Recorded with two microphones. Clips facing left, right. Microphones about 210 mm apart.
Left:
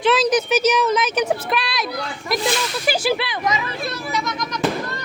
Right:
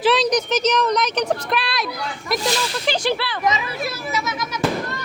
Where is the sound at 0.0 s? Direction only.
Centre (ahead or behind).